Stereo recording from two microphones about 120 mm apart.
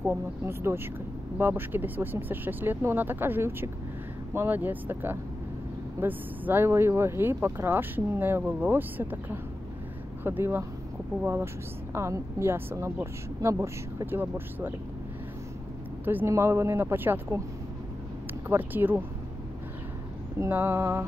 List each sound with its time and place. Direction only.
0.0 s speech: 15° right (ahead or behind)
11.9 s speech: 25° right (ahead or behind)
16.1 s speech: 20° right (ahead or behind)
18.5 s speech: 15° right (ahead or behind)
20.3 s speech: 20° right (ahead or behind)